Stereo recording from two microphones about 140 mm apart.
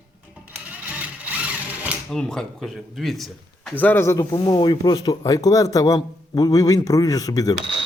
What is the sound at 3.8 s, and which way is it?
Speech, 15° left (ahead or behind).